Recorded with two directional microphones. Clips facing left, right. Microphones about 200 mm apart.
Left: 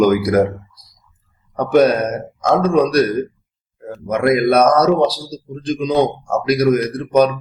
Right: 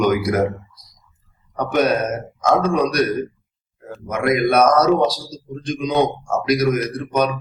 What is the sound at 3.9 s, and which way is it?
A man's voice, 30° left (ahead or behind).